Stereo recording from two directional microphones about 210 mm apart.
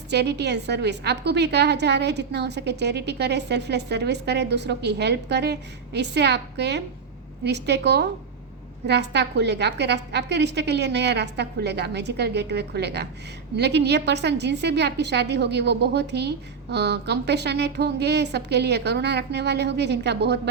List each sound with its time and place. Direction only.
0.1 s a woman's voice: 55° right (ahead or behind)